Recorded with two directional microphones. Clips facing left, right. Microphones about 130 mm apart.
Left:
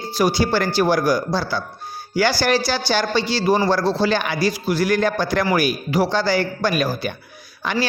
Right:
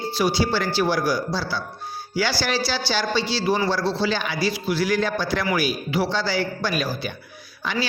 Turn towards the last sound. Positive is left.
turn(degrees=50)  # may be behind; listen again after turning